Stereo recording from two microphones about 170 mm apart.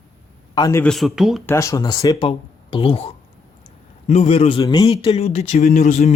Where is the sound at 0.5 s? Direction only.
20° left (ahead or behind).